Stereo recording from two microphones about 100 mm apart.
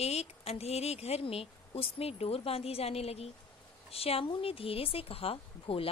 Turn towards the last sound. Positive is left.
turn(degrees=70)  # may be behind; listen again after turning